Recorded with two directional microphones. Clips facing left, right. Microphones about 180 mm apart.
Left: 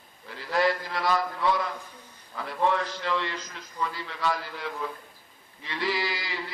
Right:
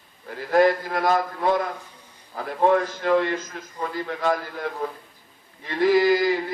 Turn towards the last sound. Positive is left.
turn(degrees=-50)  # may be behind; listen again after turning